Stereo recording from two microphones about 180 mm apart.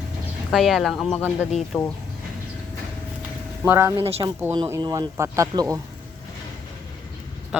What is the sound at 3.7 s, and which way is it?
Speech, 15° right (ahead or behind).